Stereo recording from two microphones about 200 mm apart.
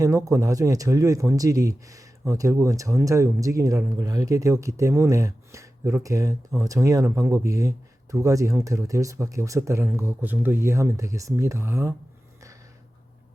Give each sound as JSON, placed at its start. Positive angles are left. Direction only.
{"t": 0.0, "sound": "speech", "side_deg": -15}